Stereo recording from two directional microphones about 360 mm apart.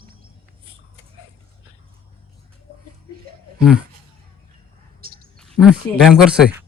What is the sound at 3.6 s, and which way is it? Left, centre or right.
Speech, centre.